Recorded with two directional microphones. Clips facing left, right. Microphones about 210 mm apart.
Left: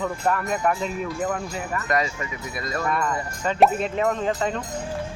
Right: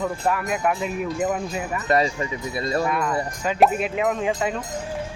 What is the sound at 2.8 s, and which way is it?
Speech, 5° right (ahead or behind).